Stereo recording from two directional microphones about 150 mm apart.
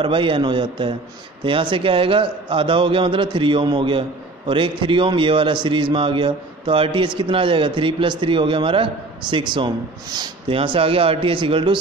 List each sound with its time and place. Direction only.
0.0 s a man's voice: 35° right (ahead or behind)